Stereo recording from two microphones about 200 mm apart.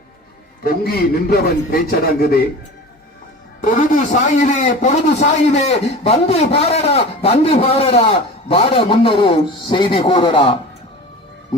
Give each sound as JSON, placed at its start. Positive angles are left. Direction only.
{"t": 0.6, "sound": "a man's voice", "side_deg": 50}
{"t": 3.6, "sound": "a man's voice", "side_deg": 40}